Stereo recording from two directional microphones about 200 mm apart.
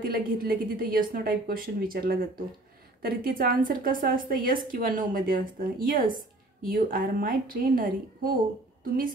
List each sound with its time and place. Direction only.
0.0 s a woman's voice: 45° right (ahead or behind)